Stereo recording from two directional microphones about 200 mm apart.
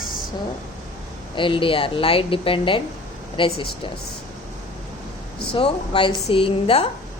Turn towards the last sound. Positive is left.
turn(degrees=30)  # may be behind; listen again after turning